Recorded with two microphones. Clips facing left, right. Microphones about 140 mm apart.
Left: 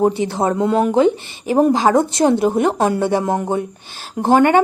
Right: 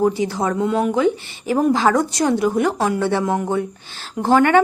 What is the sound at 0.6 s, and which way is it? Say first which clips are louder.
Speech: left 3 dB; 40° left (ahead or behind).